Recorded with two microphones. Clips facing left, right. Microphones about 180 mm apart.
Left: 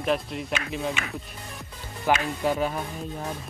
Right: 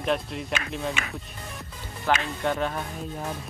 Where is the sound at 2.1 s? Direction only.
10° left (ahead or behind).